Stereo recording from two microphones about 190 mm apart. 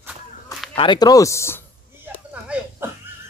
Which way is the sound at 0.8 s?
20° left (ahead or behind).